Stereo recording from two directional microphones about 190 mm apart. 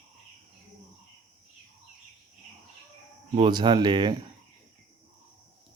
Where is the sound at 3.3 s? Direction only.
25° right (ahead or behind).